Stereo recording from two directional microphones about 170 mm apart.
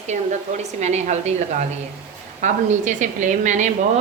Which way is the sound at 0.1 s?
45° right (ahead or behind).